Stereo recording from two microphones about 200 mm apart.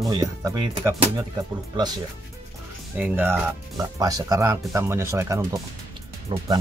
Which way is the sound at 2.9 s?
10° right (ahead or behind).